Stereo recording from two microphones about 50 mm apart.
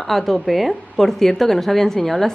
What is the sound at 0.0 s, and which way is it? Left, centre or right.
Speech, centre.